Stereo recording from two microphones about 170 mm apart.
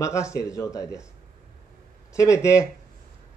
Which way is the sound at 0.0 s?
15° left (ahead or behind).